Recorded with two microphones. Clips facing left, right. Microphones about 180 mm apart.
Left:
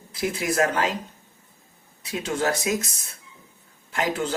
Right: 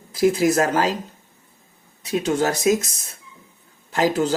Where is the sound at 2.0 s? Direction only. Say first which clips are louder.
Right 5 dB; 40° right (ahead or behind).